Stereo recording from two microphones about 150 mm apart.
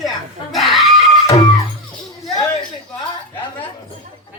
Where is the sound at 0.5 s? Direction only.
Centre (ahead or behind).